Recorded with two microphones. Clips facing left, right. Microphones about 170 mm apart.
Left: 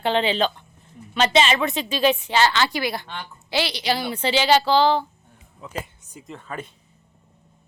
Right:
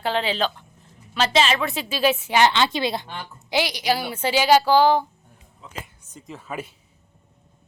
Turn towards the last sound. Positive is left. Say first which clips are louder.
# right 1 dB
turn(degrees=-10)  # may be behind; listen again after turning